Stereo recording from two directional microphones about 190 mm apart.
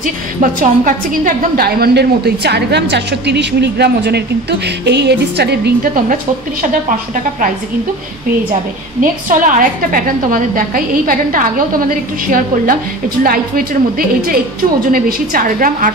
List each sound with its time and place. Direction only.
0.0 s a woman's voice: 45° right (ahead or behind)
9.0 s a woman's voice: 45° right (ahead or behind)
13.2 s a woman's voice: 50° right (ahead or behind)